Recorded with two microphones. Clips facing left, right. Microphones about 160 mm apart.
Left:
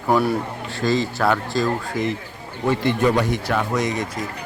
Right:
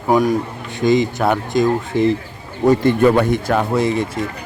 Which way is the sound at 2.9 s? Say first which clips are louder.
Right 5 dB; 55° right (ahead or behind).